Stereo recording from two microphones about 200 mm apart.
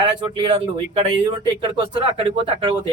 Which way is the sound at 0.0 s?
25° right (ahead or behind).